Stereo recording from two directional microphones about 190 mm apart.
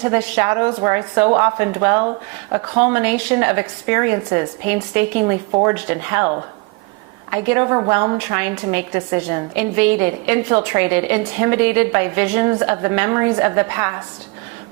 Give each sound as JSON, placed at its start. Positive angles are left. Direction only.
{"t": 0.0, "sound": "a woman's voice", "side_deg": -15}